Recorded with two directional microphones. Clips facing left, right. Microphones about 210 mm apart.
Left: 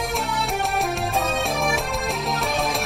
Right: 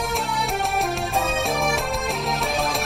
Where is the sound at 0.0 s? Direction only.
Centre (ahead or behind).